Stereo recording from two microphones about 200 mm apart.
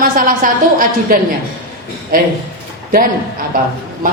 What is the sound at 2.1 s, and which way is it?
Speech, 45° right (ahead or behind).